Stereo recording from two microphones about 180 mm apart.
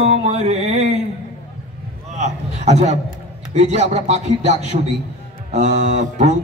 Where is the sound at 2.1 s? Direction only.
40° right (ahead or behind).